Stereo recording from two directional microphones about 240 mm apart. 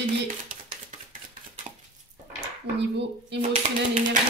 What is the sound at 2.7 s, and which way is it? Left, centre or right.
Speech, right.